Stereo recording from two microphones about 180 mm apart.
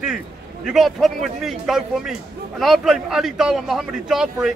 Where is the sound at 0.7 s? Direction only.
Centre (ahead or behind).